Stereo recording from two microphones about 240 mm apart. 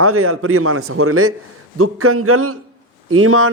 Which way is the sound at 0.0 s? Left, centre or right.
Right.